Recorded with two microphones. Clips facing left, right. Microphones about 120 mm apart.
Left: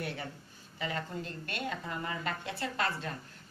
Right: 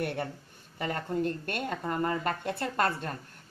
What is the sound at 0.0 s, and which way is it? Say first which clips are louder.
A woman's voice: right 6 dB; 55° right (ahead or behind).